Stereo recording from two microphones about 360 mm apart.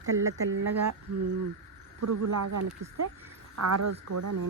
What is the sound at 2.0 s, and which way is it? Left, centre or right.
Speech, right.